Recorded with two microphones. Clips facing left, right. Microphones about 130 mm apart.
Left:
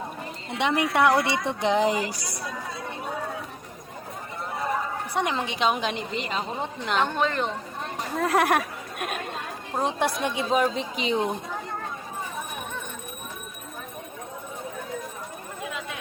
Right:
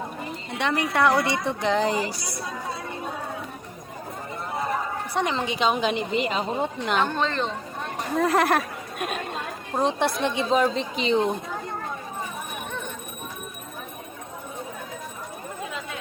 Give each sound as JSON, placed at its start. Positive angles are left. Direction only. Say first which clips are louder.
{"t": 0.6, "sound": "a woman's voice", "louder": "left 1 dB", "side_deg": 15}
{"t": 5.1, "sound": "a woman's voice", "louder": "right 2 dB", "side_deg": 5}
{"t": 7.0, "sound": "speech", "louder": "left 2 dB", "side_deg": 15}
{"t": 8.1, "sound": "speech", "louder": "right 1 dB", "side_deg": 5}